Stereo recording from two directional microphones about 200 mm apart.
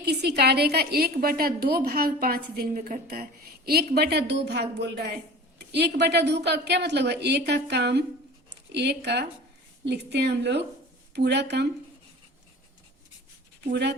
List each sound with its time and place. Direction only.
0.0 s a woman's voice: 55° right (ahead or behind)
13.7 s speech: 55° right (ahead or behind)